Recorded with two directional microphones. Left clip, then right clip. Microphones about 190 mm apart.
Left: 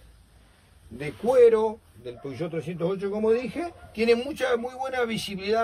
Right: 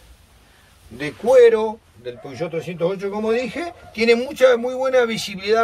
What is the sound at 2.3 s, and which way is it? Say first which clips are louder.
A man's voice: right 6 dB; 25° left (ahead or behind).